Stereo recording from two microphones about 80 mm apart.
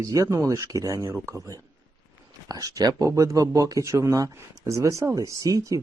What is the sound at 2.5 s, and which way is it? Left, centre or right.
Speech, right.